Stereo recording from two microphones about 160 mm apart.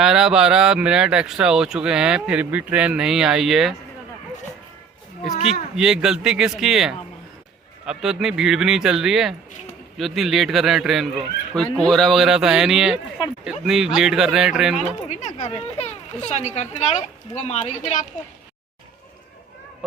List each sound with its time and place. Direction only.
0.0 s speech: 5° right (ahead or behind)
5.7 s speech: 5° right (ahead or behind)
15.0 s speech: 45° left (ahead or behind)